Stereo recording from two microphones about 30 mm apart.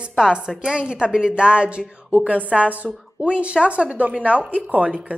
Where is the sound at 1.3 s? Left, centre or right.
Right.